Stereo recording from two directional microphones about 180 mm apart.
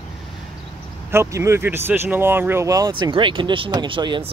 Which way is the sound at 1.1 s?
15° right (ahead or behind).